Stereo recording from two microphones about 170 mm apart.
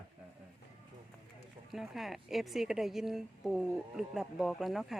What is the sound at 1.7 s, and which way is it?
A woman's voice, centre (ahead or behind).